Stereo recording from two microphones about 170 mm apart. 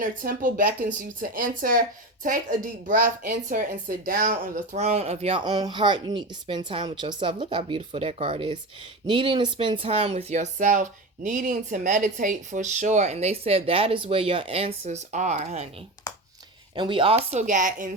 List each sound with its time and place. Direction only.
0.0 s speech: 50° right (ahead or behind)
4.7 s speech: 40° right (ahead or behind)
16.7 s speech: 30° right (ahead or behind); by 17.9 s 50° right (ahead or behind)